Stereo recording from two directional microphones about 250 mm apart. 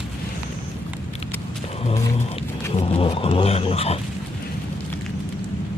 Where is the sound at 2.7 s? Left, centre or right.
Left.